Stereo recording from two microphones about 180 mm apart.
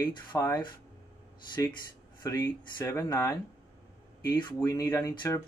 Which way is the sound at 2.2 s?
20° left (ahead or behind).